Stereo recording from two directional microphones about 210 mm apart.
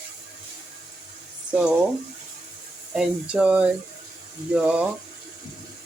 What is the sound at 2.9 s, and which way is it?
Speech, 5° right (ahead or behind).